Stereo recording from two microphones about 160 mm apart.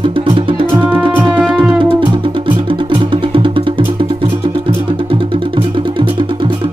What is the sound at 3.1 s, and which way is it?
Music, 30° right (ahead or behind).